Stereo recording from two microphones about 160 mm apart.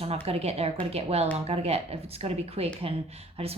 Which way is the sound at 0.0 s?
40° right (ahead or behind).